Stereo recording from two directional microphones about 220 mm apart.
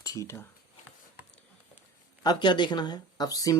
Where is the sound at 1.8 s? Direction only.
20° left (ahead or behind).